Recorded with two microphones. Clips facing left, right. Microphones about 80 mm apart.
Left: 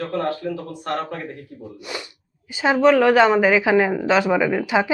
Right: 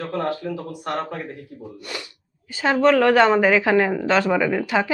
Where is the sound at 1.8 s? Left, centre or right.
Centre.